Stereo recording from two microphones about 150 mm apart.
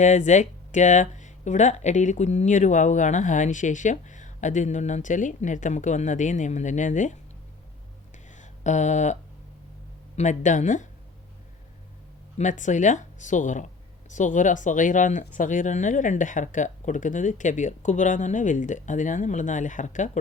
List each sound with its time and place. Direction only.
0.0 s speech: 50° left (ahead or behind)
8.4 s a sound: 50° left (ahead or behind)
10.2 s speech: 55° left (ahead or behind)
12.4 s speech: 55° left (ahead or behind)